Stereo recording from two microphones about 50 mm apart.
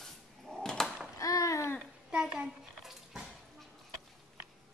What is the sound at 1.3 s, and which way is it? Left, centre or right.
Babbling, left.